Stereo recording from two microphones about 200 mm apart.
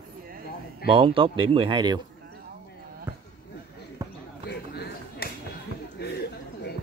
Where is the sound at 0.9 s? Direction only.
25° right (ahead or behind).